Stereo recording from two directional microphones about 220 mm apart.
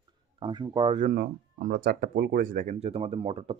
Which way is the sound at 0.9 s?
40° right (ahead or behind).